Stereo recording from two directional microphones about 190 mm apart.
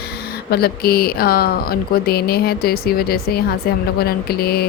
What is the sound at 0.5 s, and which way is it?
Speech, 55° left (ahead or behind).